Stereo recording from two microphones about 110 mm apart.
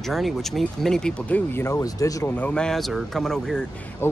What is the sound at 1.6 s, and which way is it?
Speech, 30° left (ahead or behind).